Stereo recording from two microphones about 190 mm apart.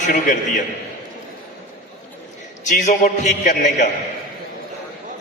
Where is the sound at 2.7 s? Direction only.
40° left (ahead or behind).